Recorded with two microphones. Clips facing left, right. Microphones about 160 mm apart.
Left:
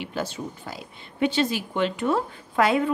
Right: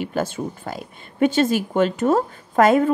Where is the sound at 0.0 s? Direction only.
50° right (ahead or behind).